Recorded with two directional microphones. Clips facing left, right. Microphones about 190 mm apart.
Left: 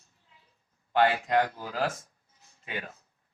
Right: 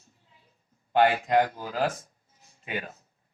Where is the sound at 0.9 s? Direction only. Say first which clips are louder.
Right 2 dB; 20° right (ahead or behind).